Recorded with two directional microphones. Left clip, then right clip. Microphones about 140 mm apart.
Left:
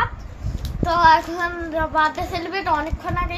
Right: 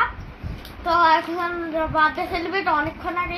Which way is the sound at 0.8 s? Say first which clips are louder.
Left 2 dB; 35° left (ahead or behind).